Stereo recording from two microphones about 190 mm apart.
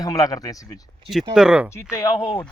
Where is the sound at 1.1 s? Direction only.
Centre (ahead or behind).